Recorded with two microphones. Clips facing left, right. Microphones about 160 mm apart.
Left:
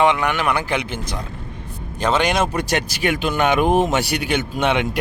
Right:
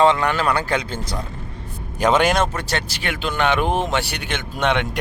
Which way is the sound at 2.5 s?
15° left (ahead or behind).